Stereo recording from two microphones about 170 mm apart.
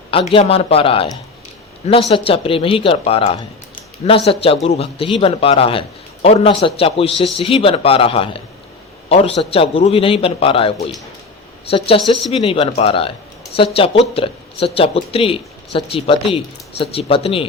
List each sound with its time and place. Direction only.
0.1 s a man's voice: 35° left (ahead or behind)